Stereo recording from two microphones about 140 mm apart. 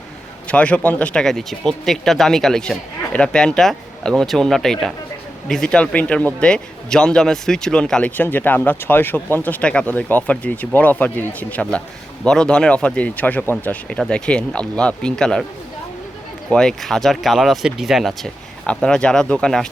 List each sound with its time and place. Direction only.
0.4 s speech: 10° left (ahead or behind)
16.5 s speech: 5° left (ahead or behind)